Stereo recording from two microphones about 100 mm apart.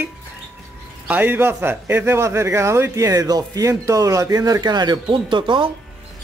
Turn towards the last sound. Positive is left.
turn(degrees=-55)  # may be behind; listen again after turning